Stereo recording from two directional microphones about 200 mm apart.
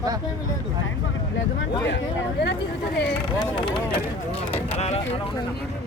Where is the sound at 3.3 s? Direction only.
25° left (ahead or behind).